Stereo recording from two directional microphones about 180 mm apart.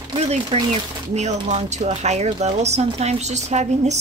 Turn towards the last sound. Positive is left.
turn(degrees=-40)  # may be behind; listen again after turning